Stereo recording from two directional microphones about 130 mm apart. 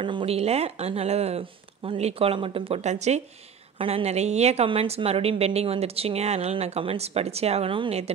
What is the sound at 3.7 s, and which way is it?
Speech, 45° right (ahead or behind).